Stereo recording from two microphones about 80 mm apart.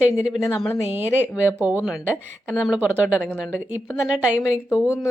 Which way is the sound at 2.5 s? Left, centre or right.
Centre.